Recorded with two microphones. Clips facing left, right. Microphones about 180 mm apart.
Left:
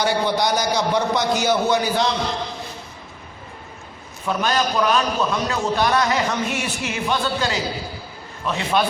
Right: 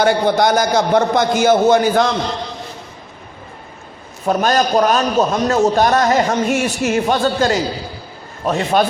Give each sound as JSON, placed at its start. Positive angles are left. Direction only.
{"t": 0.0, "sound": "a man's voice", "side_deg": -50}
{"t": 4.3, "sound": "a man's voice", "side_deg": -45}